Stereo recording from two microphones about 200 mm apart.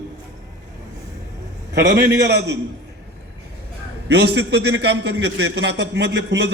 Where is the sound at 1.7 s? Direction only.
55° right (ahead or behind).